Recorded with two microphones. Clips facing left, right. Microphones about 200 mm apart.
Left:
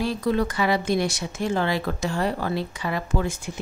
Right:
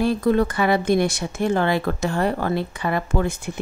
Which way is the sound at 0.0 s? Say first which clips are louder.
Right 5 dB; 55° right (ahead or behind).